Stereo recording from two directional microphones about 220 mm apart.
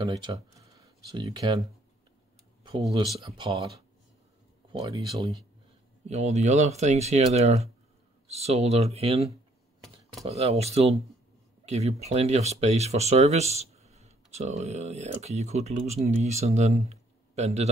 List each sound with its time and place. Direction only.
0.0 s speech: 20° right (ahead or behind)
3.2 s speech: 25° right (ahead or behind)
4.7 s speech: 20° right (ahead or behind)
10.2 s speech: 30° right (ahead or behind)